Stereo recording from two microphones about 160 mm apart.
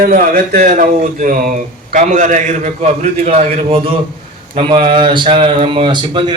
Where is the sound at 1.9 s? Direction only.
50° right (ahead or behind).